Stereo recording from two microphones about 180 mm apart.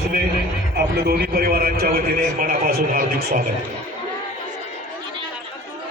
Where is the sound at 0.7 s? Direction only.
65° right (ahead or behind).